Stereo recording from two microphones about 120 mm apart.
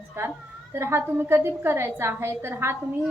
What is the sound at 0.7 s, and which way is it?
A woman's voice, 20° right (ahead or behind).